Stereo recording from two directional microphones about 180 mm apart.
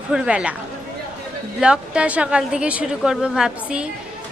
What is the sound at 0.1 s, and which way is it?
Speech, 5° right (ahead or behind).